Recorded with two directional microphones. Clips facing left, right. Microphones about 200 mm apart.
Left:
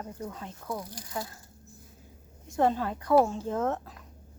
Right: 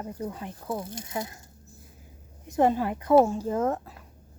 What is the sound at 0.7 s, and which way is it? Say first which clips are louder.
Speech: right 3 dB; 25° right (ahead or behind).